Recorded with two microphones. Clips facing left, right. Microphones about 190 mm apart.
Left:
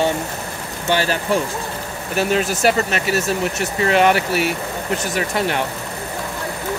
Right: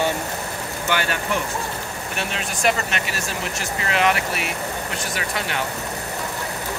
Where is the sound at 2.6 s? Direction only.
35° left (ahead or behind).